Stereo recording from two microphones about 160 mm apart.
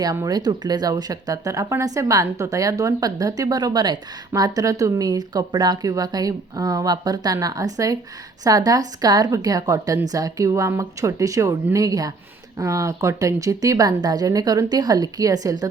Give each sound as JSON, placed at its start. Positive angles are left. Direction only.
{"t": 0.0, "sound": "speech", "side_deg": -20}